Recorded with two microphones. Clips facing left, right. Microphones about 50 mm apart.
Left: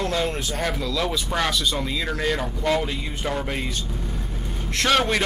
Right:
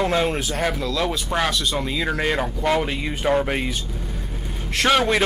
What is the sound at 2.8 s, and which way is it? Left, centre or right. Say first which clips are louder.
Speech: right 3 dB; right.